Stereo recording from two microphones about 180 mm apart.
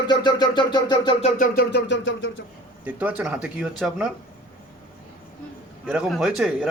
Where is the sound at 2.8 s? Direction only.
10° right (ahead or behind).